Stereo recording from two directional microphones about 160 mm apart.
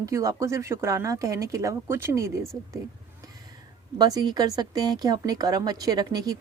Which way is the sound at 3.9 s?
25° right (ahead or behind).